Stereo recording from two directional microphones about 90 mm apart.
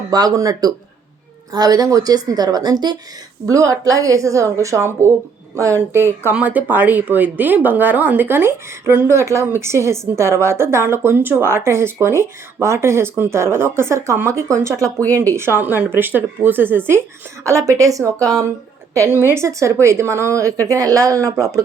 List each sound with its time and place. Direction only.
0.1 s a woman's voice: 45° right (ahead or behind)
3.4 s a woman's voice: 40° right (ahead or behind)
17.4 s a woman's voice: 35° right (ahead or behind)